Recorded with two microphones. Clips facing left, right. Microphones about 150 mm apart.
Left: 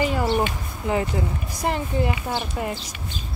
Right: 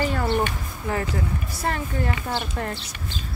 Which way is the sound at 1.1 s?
15° left (ahead or behind).